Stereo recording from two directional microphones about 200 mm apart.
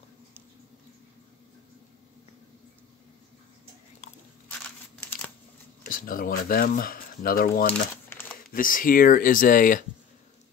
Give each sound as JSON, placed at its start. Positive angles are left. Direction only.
{"t": 4.0, "sound": "crunch", "side_deg": 35}
{"t": 5.9, "sound": "speech", "side_deg": 45}
{"t": 8.1, "sound": "crumpling", "side_deg": 10}
{"t": 8.5, "sound": "speech", "side_deg": 45}